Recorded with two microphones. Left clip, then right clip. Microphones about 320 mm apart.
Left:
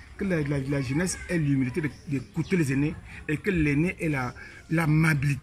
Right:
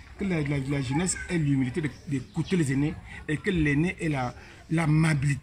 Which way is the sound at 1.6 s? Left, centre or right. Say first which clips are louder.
Left 1 dB; centre.